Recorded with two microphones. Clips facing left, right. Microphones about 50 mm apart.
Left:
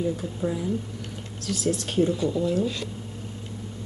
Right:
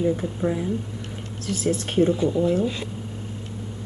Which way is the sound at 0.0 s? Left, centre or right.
Right.